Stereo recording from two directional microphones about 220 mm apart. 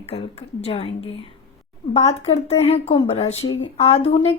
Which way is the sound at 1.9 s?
30° left (ahead or behind).